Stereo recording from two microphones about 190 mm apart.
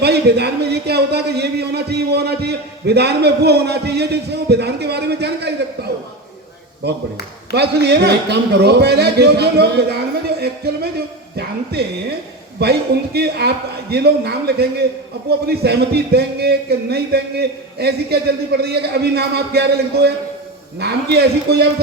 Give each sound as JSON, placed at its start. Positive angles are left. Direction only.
{"t": 0.0, "sound": "speech", "side_deg": -60}
{"t": 6.8, "sound": "speech", "side_deg": -60}